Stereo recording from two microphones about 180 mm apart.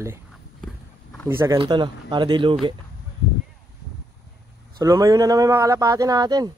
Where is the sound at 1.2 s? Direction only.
15° right (ahead or behind).